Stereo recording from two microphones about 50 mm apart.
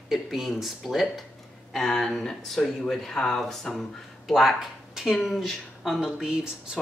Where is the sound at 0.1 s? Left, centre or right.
Centre.